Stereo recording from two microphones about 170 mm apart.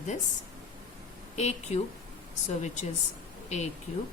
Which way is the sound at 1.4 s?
40° left (ahead or behind).